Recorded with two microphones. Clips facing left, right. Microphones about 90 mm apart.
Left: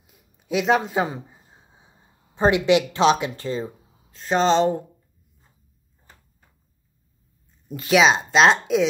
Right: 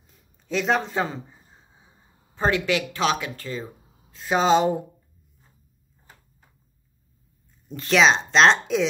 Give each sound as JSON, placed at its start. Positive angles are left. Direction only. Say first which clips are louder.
{"t": 0.0, "sound": "a sound", "louder": "left 1 dB", "side_deg": 10}
{"t": 4.1, "sound": "speech", "louder": "even", "side_deg": -5}
{"t": 7.6, "sound": "speech", "louder": "left 1 dB", "side_deg": 5}